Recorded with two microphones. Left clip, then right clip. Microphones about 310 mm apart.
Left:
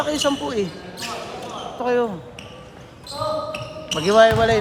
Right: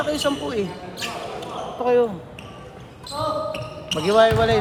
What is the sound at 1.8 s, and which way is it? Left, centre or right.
Speech, left.